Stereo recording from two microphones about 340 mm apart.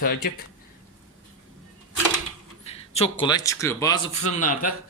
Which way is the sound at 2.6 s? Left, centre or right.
Centre.